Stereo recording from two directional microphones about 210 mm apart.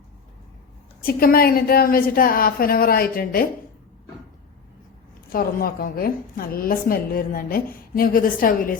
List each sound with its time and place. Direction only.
1.0 s a woman's voice: 45° left (ahead or behind)
5.3 s a woman's voice: 45° left (ahead or behind)